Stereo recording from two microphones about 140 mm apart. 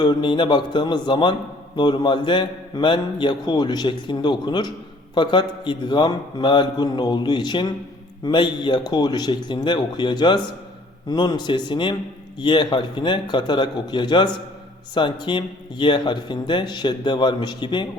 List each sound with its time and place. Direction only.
0.0 s a man's voice: 30° left (ahead or behind)